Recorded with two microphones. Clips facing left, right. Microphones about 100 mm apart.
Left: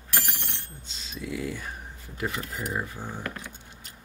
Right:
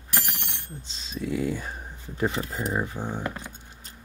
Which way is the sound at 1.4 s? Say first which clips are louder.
Right 5 dB; 20° right (ahead or behind).